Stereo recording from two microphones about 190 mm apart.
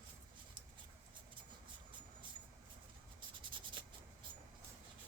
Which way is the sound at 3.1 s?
25° right (ahead or behind).